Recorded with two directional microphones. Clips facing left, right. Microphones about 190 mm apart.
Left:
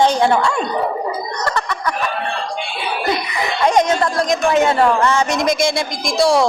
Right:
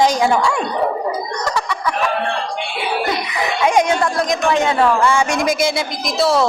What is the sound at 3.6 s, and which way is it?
Speech, 10° right (ahead or behind).